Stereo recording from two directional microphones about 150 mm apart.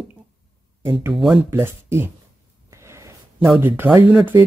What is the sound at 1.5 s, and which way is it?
Speech, 15° right (ahead or behind).